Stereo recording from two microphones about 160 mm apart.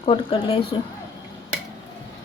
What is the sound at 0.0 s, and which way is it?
Speech, 35° left (ahead or behind).